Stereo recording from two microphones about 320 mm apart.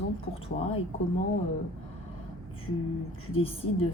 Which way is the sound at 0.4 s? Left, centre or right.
Centre.